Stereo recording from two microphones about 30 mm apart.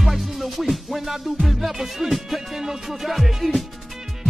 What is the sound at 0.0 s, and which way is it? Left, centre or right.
Music, centre.